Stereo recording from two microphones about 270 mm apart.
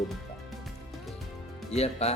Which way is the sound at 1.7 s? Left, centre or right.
Left.